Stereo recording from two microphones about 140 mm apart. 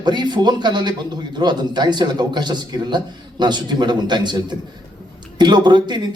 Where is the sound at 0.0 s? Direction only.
30° right (ahead or behind).